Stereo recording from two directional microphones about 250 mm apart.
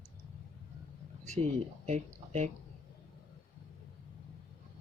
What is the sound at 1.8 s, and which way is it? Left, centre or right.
Speech, right.